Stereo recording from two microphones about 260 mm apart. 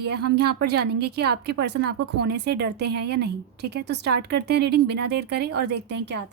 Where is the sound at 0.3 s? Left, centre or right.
Right.